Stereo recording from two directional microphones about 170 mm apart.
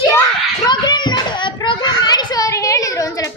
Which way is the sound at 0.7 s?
25° left (ahead or behind).